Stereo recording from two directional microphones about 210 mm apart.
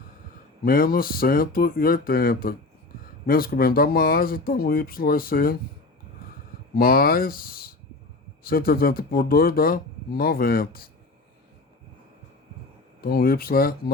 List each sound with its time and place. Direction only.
0.6 s speech: 45° left (ahead or behind)
6.7 s speech: 45° left (ahead or behind)
13.0 s speech: 45° left (ahead or behind)